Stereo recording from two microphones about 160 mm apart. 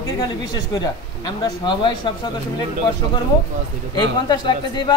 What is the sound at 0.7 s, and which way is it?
Speech, 25° left (ahead or behind).